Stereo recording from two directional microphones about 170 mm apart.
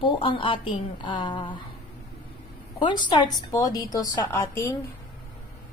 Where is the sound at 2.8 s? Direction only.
25° left (ahead or behind).